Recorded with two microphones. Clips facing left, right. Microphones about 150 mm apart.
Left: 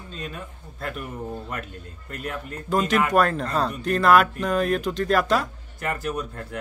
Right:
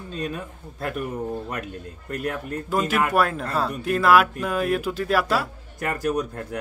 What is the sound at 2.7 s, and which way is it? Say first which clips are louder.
A man's voice: left 2 dB; 5° right (ahead or behind).